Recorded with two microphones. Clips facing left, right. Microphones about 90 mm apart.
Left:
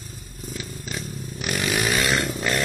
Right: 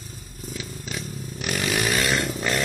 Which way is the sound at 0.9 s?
5° left (ahead or behind).